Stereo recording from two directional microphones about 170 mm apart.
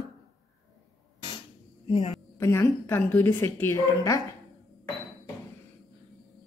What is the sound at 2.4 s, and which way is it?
A woman's voice, 15° left (ahead or behind).